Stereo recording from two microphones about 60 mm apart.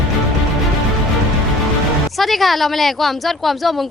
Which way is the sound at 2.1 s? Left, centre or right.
Centre.